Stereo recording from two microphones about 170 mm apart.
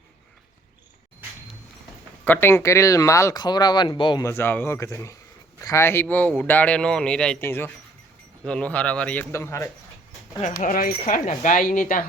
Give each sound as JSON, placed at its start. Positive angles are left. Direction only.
{"t": 2.2, "sound": "speech", "side_deg": 10}
{"t": 4.2, "sound": "speech", "side_deg": 15}
{"t": 10.4, "sound": "speech", "side_deg": 50}